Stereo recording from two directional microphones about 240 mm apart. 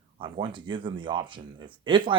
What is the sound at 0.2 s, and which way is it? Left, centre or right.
Speech, centre.